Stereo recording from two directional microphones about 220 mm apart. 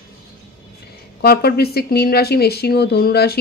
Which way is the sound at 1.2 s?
45° left (ahead or behind).